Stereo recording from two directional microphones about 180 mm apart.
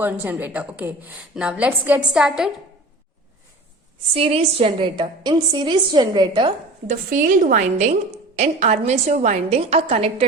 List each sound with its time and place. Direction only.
0.0 s a woman's voice: 10° right (ahead or behind)
4.1 s a woman's voice: 35° right (ahead or behind)
6.8 s a woman's voice: 50° right (ahead or behind)